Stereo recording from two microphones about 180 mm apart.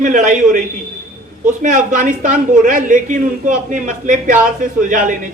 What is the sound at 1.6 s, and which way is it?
A man's voice, 45° right (ahead or behind).